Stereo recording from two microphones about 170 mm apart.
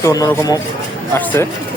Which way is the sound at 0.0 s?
20° left (ahead or behind).